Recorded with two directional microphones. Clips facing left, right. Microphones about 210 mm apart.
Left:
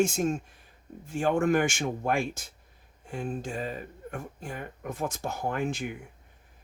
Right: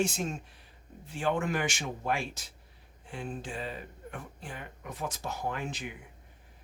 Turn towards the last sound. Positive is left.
turn(degrees=50)  # may be behind; listen again after turning